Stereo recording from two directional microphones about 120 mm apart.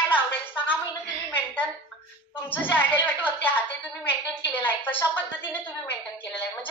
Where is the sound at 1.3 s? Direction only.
15° left (ahead or behind).